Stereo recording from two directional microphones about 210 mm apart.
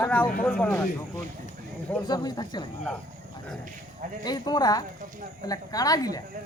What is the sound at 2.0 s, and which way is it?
Speech, 20° left (ahead or behind).